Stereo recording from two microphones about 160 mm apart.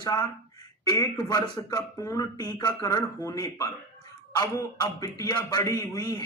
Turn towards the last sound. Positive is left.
turn(degrees=20)  # may be behind; listen again after turning